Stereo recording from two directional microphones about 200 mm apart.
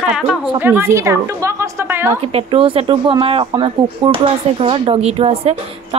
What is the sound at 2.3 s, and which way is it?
A woman's voice, 30° right (ahead or behind).